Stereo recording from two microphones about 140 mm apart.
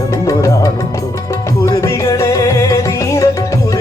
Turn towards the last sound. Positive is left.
turn(degrees=25)  # may be behind; listen again after turning